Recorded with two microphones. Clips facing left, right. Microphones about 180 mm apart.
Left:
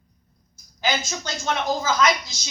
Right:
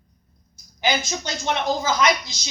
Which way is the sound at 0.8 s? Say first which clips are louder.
Right 2 dB; 15° right (ahead or behind).